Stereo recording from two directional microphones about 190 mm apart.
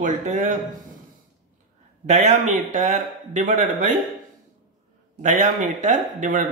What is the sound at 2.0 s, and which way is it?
Speech, 40° right (ahead or behind).